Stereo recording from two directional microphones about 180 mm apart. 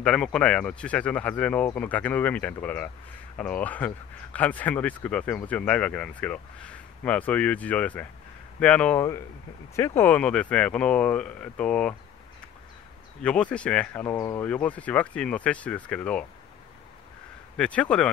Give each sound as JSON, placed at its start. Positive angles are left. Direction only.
{"t": 0.0, "sound": "speech", "side_deg": 5}
{"t": 13.2, "sound": "speech", "side_deg": 5}
{"t": 17.6, "sound": "speech", "side_deg": 5}